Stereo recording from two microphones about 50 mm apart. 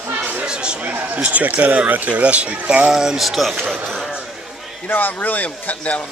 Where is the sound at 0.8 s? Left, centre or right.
Right.